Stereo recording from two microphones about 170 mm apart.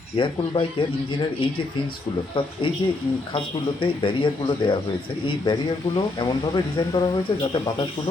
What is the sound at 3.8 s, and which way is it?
Speech, 30° left (ahead or behind).